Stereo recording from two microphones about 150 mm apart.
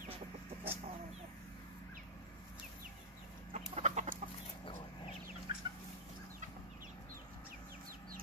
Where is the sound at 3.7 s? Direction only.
50° right (ahead or behind).